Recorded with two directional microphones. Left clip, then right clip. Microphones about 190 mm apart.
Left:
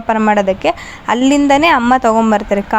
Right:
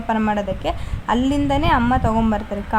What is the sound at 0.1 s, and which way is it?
A woman's voice, 25° left (ahead or behind).